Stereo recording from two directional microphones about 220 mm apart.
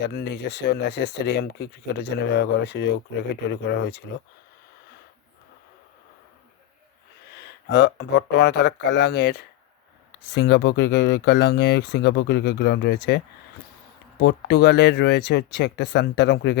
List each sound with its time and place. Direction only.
0.0 s speech: 45° left (ahead or behind)
7.7 s speech: 50° left (ahead or behind)